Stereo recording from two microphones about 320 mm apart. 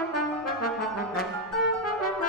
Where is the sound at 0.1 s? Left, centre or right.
Left.